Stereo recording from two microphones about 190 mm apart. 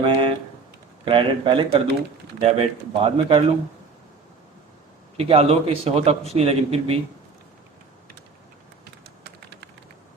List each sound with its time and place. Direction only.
0.0 s a sound: 30° right (ahead or behind)
1.0 s speech: 25° right (ahead or behind)
5.1 s speech: 30° right (ahead or behind)
9.2 s typing: 60° right (ahead or behind)